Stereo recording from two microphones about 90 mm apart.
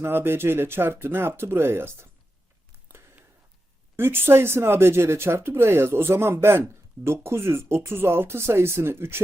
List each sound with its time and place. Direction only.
0.0 s speech: 25° right (ahead or behind)
3.9 s speech: 25° right (ahead or behind)